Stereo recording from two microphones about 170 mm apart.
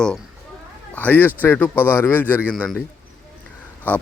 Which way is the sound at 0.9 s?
10° left (ahead or behind).